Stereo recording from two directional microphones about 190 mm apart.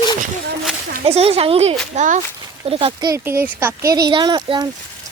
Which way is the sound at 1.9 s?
40° right (ahead or behind).